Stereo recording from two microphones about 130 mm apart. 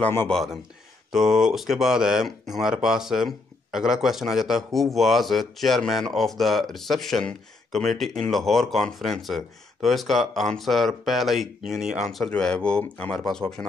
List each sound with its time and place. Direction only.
0.0 s speech: 15° left (ahead or behind)
0.3 s speech: centre (ahead or behind)